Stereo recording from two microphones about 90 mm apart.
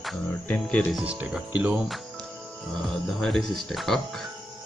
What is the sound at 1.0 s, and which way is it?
Speech, 15° right (ahead or behind).